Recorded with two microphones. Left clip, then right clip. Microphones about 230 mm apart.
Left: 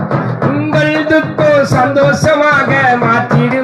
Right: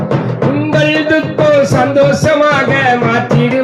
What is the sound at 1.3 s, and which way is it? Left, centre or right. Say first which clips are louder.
Music: right 2 dB; centre.